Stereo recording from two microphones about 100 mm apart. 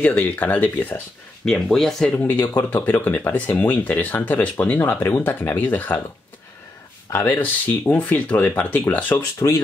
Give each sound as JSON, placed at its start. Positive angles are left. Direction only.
{"t": 0.0, "sound": "speech", "side_deg": 15}
{"t": 1.4, "sound": "speech", "side_deg": 5}
{"t": 2.1, "sound": "speech", "side_deg": 20}
{"t": 7.1, "sound": "speech", "side_deg": 20}
{"t": 9.1, "sound": "speech", "side_deg": 30}